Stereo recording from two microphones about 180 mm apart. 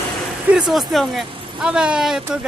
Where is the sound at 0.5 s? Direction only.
Centre (ahead or behind).